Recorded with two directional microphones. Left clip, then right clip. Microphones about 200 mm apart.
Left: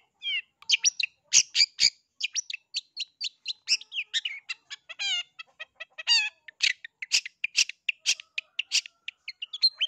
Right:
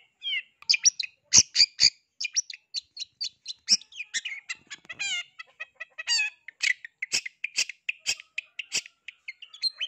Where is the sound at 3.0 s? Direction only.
35° left (ahead or behind).